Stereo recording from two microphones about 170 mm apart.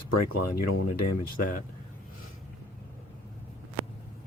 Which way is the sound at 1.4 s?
55° left (ahead or behind).